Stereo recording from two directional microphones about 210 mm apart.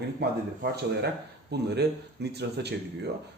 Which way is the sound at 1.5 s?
50° right (ahead or behind).